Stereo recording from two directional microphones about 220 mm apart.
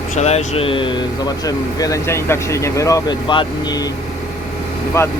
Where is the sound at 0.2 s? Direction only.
30° left (ahead or behind).